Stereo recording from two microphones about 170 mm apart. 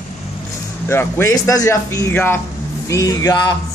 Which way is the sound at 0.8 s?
15° left (ahead or behind).